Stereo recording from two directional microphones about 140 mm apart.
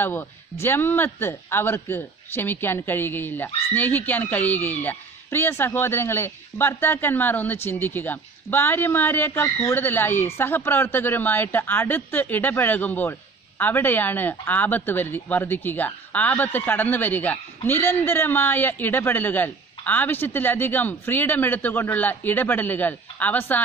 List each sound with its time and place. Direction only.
0.0 s a man's voice: 15° left (ahead or behind)